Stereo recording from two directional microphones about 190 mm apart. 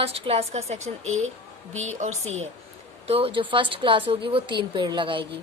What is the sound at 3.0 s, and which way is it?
A woman's voice, 30° right (ahead or behind).